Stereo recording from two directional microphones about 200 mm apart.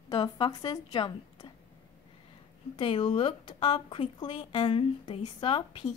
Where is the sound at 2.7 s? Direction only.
25° left (ahead or behind).